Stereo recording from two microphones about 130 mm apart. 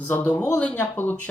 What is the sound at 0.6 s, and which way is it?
Speech, 10° left (ahead or behind).